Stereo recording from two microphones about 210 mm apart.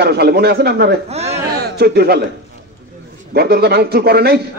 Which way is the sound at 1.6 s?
50° right (ahead or behind).